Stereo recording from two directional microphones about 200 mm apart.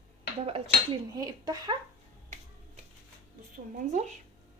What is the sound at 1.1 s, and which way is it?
Speech, 20° right (ahead or behind).